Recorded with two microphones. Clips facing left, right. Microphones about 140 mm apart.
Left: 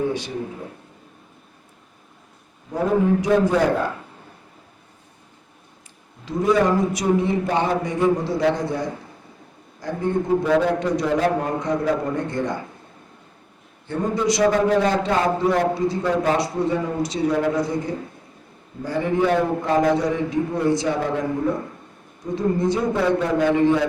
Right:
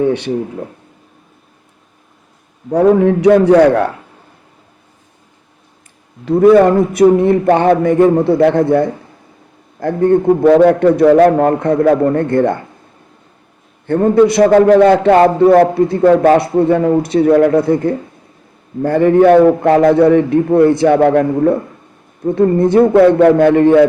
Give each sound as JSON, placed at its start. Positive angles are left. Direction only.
{"t": 0.0, "sound": "a man's voice", "side_deg": -65}
{"t": 2.6, "sound": "a man's voice", "side_deg": -70}
{"t": 6.2, "sound": "a man's voice", "side_deg": -60}
{"t": 13.8, "sound": "a man's voice", "side_deg": -60}